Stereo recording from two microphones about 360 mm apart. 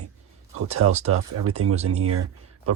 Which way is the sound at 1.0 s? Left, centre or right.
Right.